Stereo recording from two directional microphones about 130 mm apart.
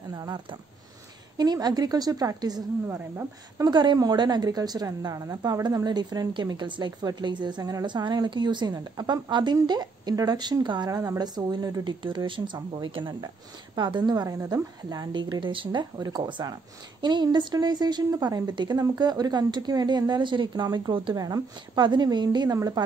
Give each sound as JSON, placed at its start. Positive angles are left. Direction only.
{"t": 0.1, "sound": "a woman's voice", "side_deg": -30}